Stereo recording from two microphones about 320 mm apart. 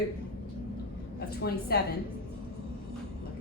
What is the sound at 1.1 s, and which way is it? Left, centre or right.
Speech, left.